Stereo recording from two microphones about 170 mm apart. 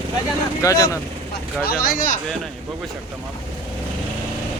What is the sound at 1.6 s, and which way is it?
Speech, 60° left (ahead or behind).